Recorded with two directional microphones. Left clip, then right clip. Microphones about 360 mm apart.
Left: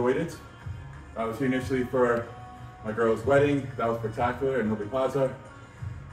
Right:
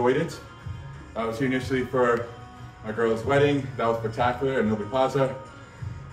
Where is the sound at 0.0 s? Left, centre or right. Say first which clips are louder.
Right 3 dB; centre.